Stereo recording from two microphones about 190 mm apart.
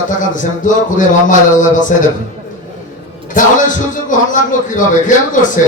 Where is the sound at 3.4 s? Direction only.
45° left (ahead or behind).